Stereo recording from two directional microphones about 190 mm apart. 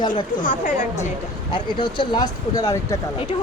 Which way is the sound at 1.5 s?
25° left (ahead or behind).